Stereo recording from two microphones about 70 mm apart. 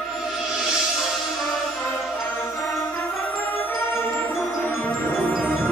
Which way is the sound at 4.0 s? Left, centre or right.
Left.